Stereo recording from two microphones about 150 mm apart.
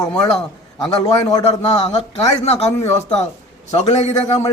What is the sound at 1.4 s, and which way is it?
A man's voice, 45° left (ahead or behind).